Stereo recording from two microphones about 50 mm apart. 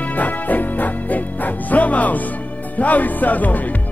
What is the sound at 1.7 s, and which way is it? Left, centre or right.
Music, left.